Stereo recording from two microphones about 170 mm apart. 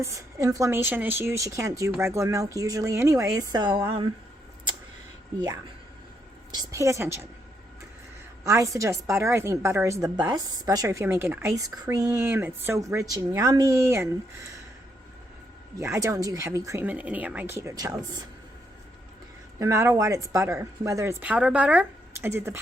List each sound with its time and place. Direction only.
0.0 s a woman's voice: 20° right (ahead or behind)
6.5 s a woman's voice: 20° right (ahead or behind)
8.4 s a woman's voice: 20° right (ahead or behind)
15.8 s a woman's voice: 15° right (ahead or behind)
19.5 s a woman's voice: 15° right (ahead or behind)